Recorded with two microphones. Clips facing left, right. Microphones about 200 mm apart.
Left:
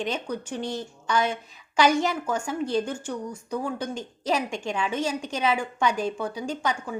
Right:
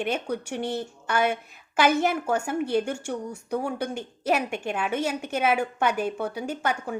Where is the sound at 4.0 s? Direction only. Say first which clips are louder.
Right 2 dB; 60° right (ahead or behind).